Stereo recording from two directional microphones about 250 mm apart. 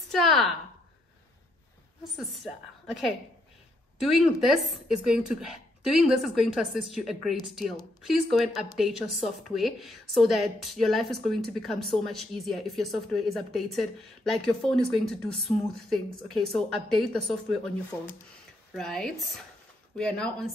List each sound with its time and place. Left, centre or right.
0.1 s a woman's voice: centre
4.0 s a woman's voice: centre
18.7 s a woman's voice: centre